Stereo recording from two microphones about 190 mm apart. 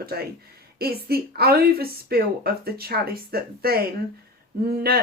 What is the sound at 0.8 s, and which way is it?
A woman's voice, 55° right (ahead or behind).